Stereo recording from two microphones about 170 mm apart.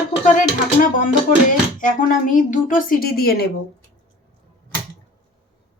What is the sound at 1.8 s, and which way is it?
Speech, 50° left (ahead or behind).